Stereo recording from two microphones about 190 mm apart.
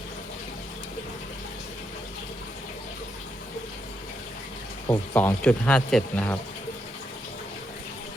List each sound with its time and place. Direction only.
4.9 s speech: 10° left (ahead or behind)